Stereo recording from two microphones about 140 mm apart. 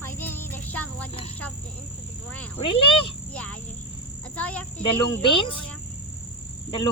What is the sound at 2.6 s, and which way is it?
Speech, 40° left (ahead or behind).